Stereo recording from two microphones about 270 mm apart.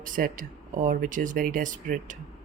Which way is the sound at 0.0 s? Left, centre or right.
Right.